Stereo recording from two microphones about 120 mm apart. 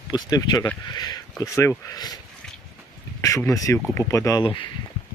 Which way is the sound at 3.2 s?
25° left (ahead or behind).